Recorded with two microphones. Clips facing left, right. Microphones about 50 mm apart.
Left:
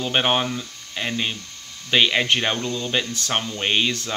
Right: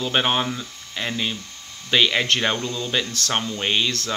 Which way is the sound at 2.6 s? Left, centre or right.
Left.